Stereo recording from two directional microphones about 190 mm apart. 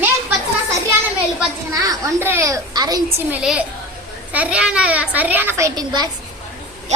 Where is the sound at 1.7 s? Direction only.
20° right (ahead or behind).